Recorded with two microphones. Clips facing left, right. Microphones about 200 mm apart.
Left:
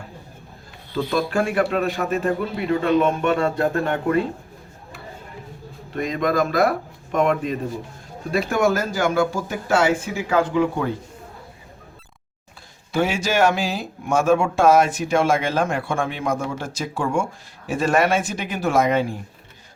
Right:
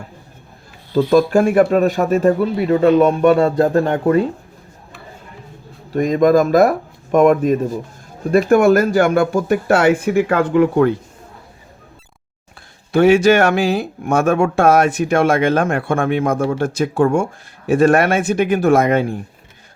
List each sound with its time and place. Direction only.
0.9 s a man's voice: 45° right (ahead or behind)
5.9 s speech: 45° right (ahead or behind); by 10.9 s 60° right (ahead or behind)
12.9 s speech: 60° right (ahead or behind)